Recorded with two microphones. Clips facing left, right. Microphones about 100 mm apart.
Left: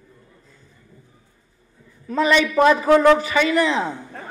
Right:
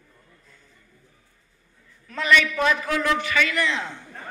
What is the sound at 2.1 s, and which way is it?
A man's voice, 35° left (ahead or behind).